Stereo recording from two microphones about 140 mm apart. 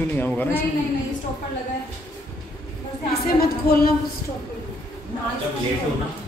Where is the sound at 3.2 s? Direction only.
90° left.